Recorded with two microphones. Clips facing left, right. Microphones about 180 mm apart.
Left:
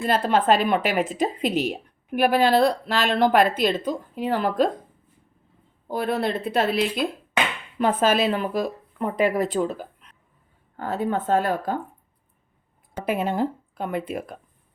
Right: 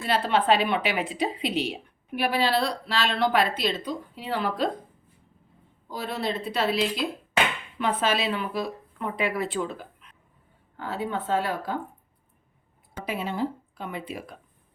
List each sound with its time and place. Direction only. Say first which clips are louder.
0.0 s a woman's voice: left 3 dB; 45° left (ahead or behind)
5.9 s a woman's voice: left 6 dB; 55° left (ahead or behind)
13.1 s a woman's voice: left 5 dB; 50° left (ahead or behind)